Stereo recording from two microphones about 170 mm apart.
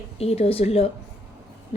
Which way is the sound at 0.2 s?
35° left (ahead or behind).